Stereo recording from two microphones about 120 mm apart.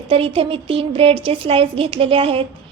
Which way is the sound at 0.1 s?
50° right (ahead or behind).